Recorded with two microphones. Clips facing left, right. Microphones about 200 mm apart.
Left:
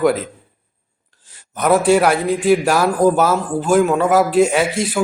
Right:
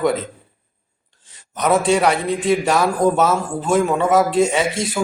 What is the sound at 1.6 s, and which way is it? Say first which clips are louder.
A man's voice: left 3 dB; 5° left (ahead or behind).